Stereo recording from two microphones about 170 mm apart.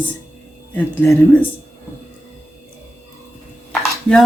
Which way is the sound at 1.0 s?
10° left (ahead or behind).